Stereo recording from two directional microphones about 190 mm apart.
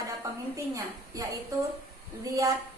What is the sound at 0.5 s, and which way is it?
Speech, 15° right (ahead or behind).